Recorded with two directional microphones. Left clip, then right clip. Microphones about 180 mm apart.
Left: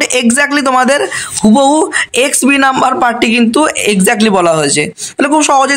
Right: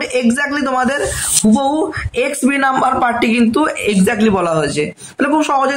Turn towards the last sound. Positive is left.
turn(degrees=50)  # may be behind; listen again after turning